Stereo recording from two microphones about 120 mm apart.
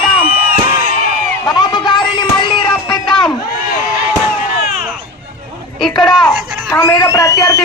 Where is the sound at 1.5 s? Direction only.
35° left (ahead or behind).